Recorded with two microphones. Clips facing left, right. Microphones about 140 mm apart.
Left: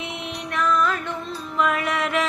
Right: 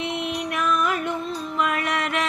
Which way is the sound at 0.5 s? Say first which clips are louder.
Left 3 dB; 15° right (ahead or behind).